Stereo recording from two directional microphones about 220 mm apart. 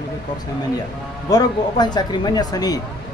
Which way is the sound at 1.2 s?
15° left (ahead or behind).